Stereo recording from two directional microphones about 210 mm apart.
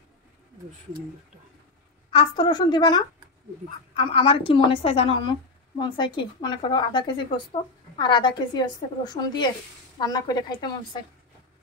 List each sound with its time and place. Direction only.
2.0 s a woman's voice: 25° left (ahead or behind)